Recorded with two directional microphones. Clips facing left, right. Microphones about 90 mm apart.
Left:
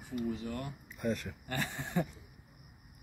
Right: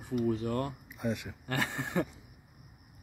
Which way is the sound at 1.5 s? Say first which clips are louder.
Right 3 dB; 85° right.